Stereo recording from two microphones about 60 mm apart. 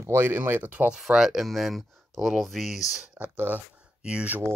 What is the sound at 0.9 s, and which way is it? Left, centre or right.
Speech, centre.